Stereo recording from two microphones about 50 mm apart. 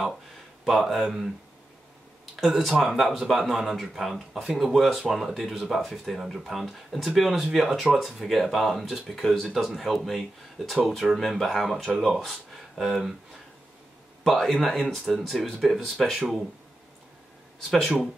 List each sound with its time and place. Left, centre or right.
0.7 s speech: centre
2.6 s speech: centre
14.2 s speech: centre
17.6 s speech: centre